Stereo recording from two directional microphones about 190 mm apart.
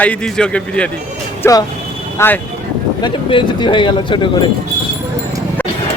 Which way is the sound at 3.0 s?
25° left (ahead or behind).